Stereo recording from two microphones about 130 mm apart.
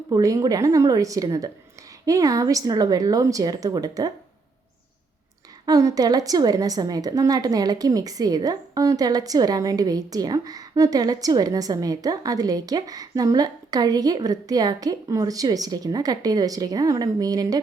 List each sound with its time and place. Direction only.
0.1 s a woman's voice: 25° right (ahead or behind)
5.6 s a woman's voice: 30° right (ahead or behind)